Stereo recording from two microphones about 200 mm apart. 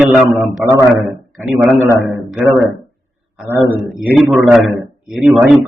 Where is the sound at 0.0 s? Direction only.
Centre (ahead or behind).